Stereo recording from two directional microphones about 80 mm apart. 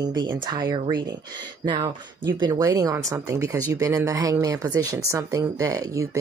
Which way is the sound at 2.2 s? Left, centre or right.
Right.